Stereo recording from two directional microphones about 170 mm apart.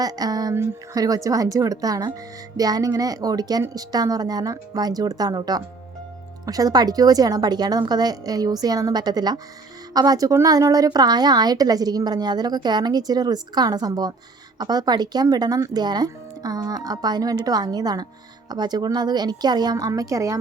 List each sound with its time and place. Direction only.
0.0 s speech: 20° right (ahead or behind)